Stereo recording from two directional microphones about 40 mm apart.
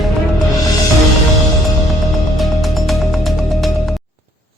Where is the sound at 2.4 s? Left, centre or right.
Centre.